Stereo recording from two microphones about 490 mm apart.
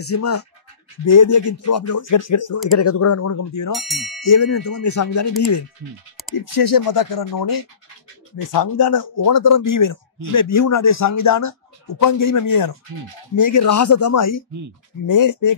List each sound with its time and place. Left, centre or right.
0.0 s speech: left
2.8 s speech: left
3.7 s ding: centre
4.2 s speech: left
6.3 s speech: left